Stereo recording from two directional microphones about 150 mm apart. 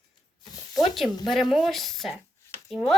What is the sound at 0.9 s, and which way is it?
Speech, centre (ahead or behind).